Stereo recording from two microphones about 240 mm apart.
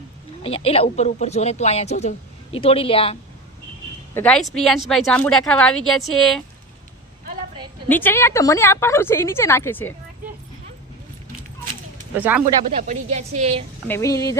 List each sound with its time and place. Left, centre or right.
0.4 s a woman's voice: left
4.1 s a woman's voice: centre
7.9 s a woman's voice: centre
12.7 s a woman's voice: right
13.8 s a woman's voice: centre